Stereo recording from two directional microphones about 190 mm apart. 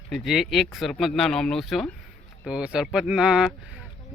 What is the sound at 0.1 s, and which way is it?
Speech, centre (ahead or behind).